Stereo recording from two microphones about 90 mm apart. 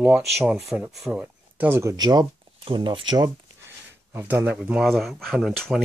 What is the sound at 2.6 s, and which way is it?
Speech, 60° right (ahead or behind).